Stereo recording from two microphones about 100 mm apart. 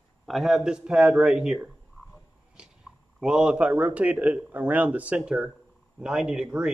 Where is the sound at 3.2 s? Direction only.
10° right (ahead or behind).